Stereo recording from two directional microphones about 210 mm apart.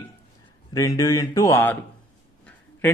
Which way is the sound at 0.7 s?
15° left (ahead or behind).